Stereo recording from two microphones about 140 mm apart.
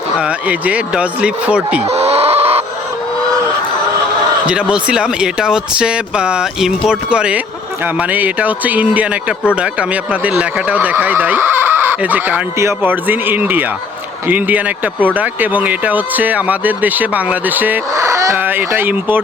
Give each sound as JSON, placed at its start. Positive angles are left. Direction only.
{"t": 0.2, "sound": "speech", "side_deg": -10}
{"t": 1.9, "sound": "chicken", "side_deg": -50}
{"t": 4.4, "sound": "speech", "side_deg": -5}